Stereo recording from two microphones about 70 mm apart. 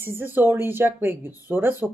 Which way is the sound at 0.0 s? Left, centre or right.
Right.